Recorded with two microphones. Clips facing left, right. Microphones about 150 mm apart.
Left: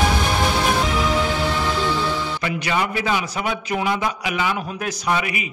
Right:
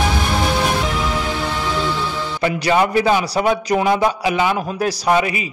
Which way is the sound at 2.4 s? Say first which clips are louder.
Right 11 dB; 35° right (ahead or behind).